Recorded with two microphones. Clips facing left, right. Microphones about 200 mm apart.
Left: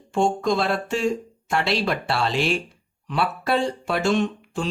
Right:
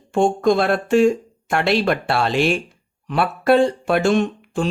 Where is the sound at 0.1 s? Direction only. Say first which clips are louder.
Right 5 dB; 55° right (ahead or behind).